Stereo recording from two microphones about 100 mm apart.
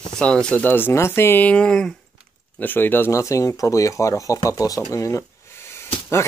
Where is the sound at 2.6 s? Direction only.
20° left (ahead or behind).